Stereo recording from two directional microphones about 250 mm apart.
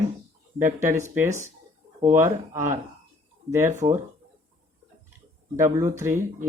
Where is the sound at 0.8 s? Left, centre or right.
Centre.